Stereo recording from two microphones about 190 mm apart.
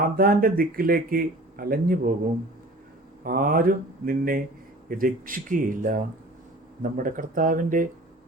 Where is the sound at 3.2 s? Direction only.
50° right (ahead or behind).